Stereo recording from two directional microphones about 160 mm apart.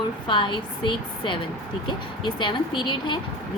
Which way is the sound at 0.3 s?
30° left (ahead or behind).